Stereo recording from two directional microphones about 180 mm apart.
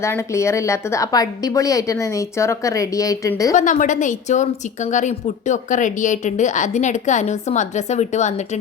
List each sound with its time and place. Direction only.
0.0 s a woman's voice: 15° left (ahead or behind)
3.5 s a woman's voice: 45° left (ahead or behind)